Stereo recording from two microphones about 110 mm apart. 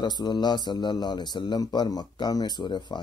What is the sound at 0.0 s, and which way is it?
A man's voice, 40° left (ahead or behind).